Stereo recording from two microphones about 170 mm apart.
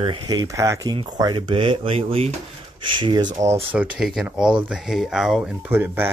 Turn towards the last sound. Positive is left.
turn(degrees=-10)  # may be behind; listen again after turning